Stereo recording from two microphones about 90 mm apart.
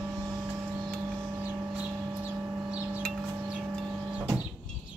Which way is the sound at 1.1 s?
20° right (ahead or behind).